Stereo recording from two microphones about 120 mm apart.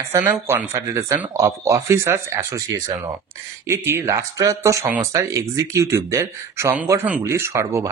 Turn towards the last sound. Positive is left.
turn(degrees=-25)  # may be behind; listen again after turning